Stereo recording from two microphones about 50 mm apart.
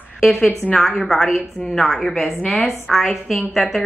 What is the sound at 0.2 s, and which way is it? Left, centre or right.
A woman's voice, centre.